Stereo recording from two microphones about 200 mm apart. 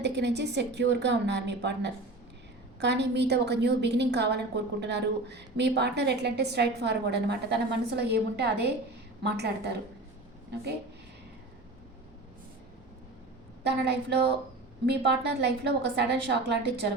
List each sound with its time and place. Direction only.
0.0 s a woman's voice: 60° right (ahead or behind)
13.7 s a woman's voice: 55° right (ahead or behind)